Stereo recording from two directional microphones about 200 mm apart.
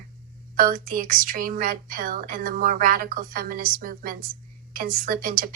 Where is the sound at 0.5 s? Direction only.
45° right (ahead or behind).